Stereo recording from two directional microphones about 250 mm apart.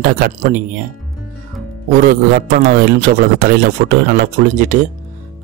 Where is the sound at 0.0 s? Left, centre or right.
Right.